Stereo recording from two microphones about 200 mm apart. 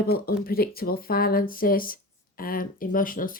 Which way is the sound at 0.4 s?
50° left (ahead or behind).